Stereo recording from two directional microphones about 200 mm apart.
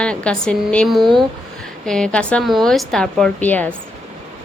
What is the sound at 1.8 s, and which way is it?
A woman's voice, 5° left (ahead or behind).